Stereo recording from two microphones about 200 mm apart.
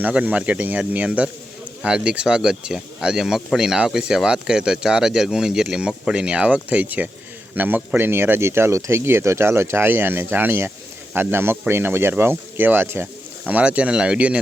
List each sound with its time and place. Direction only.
0.0 s speech: 5° right (ahead or behind)